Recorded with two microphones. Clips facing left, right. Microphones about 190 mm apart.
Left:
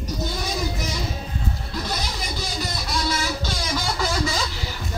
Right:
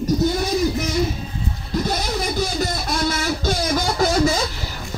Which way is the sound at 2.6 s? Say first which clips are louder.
Right 5 dB; 50° right (ahead or behind).